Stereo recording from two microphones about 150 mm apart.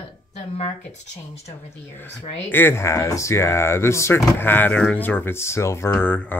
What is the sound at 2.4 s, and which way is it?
Speech, 15° left (ahead or behind).